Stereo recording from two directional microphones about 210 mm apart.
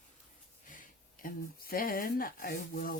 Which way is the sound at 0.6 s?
40° left (ahead or behind).